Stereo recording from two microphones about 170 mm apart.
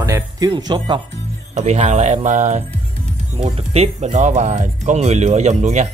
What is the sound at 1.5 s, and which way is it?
Speech, 45° right (ahead or behind).